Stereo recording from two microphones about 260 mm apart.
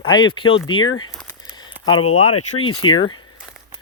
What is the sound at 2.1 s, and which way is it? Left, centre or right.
Speech, left.